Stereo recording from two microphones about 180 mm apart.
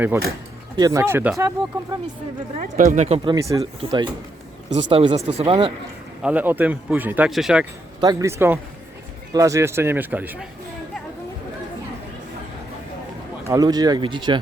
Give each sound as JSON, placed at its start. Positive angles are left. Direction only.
{"t": 0.8, "sound": "speech", "side_deg": -20}
{"t": 2.6, "sound": "speech", "side_deg": -45}
{"t": 3.2, "sound": "speech", "side_deg": -15}
{"t": 3.6, "sound": "speech", "side_deg": -30}
{"t": 6.2, "sound": "speech", "side_deg": -10}
{"t": 8.0, "sound": "speech", "side_deg": -15}
{"t": 13.5, "sound": "speech", "side_deg": -20}